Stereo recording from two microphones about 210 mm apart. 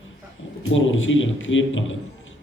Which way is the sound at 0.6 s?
65° left (ahead or behind).